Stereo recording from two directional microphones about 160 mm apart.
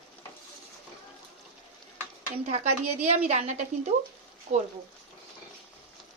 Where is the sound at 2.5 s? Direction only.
45° right (ahead or behind).